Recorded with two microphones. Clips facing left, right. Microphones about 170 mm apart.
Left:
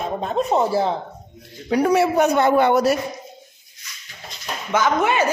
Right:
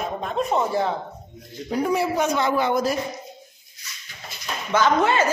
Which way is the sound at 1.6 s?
75° left (ahead or behind).